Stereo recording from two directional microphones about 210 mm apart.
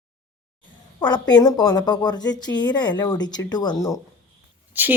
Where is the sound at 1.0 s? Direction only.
20° left (ahead or behind).